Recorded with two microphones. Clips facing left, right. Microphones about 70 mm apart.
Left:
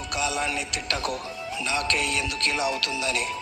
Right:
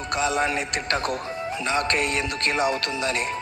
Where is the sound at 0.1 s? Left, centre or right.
Right.